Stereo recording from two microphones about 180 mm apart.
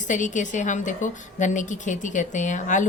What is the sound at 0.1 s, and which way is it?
A woman's voice, 45° left (ahead or behind).